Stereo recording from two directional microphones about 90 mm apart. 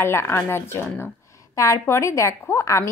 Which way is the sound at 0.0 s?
30° left (ahead or behind).